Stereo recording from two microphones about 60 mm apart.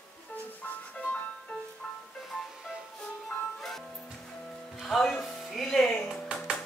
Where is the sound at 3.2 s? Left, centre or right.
Centre.